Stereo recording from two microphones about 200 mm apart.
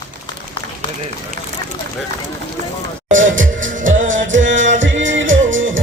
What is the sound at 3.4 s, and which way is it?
Music, 40° right (ahead or behind).